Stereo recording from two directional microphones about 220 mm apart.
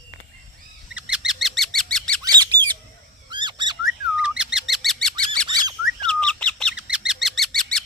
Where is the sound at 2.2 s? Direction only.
20° right (ahead or behind).